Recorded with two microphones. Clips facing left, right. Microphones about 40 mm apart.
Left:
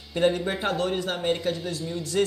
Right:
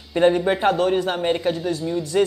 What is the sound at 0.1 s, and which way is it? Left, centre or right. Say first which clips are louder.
Speech: right 6 dB; centre.